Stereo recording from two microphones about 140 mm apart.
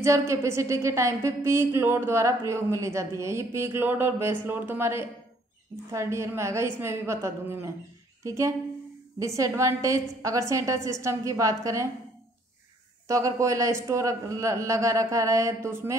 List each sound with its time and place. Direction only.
0.0 s a woman's voice: 20° right (ahead or behind)
13.1 s a woman's voice: 20° right (ahead or behind)